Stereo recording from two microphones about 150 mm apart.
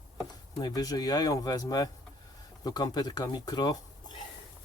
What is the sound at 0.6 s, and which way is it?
Speech, 25° left (ahead or behind).